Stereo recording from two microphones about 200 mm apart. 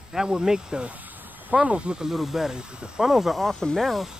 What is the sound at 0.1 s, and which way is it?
Speech, 5° right (ahead or behind).